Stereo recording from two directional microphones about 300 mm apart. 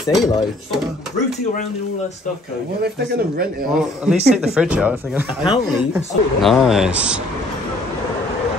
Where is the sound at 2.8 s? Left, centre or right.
Right.